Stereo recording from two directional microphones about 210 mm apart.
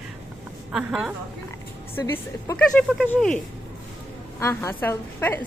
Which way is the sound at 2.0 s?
10° left (ahead or behind).